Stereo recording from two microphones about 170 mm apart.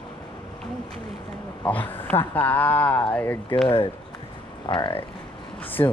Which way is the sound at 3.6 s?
30° left (ahead or behind).